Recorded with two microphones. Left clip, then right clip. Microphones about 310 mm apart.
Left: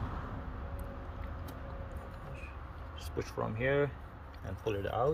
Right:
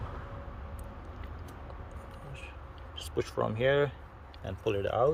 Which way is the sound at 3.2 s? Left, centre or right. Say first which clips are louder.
Right 5 dB; right.